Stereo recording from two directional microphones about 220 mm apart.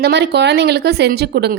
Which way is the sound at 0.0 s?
50° right (ahead or behind).